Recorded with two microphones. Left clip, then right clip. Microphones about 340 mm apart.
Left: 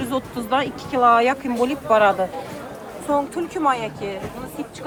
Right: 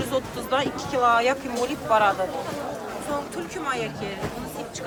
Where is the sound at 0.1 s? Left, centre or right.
Left.